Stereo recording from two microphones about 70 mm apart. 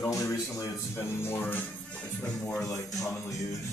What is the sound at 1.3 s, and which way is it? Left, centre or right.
Speech, left.